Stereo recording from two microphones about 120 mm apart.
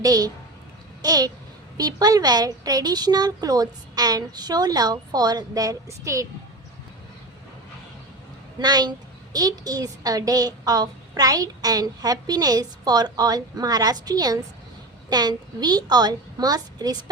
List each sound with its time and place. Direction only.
0.0 s a woman's voice: 30° right (ahead or behind)
8.5 s a woman's voice: 35° right (ahead or behind)